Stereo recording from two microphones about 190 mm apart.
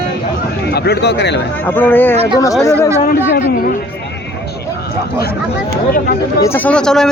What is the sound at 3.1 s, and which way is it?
Speech, 50° left (ahead or behind).